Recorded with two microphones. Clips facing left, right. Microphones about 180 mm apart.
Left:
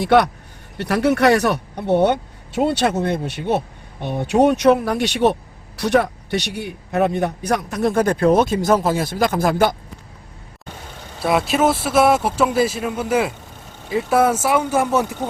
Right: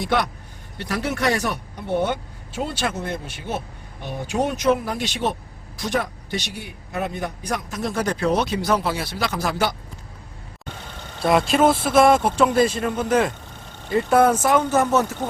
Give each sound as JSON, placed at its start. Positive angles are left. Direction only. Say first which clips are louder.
{"t": 0.0, "sound": "speech", "louder": "left 8 dB", "side_deg": 60}
{"t": 11.2, "sound": "speech", "louder": "even", "side_deg": 5}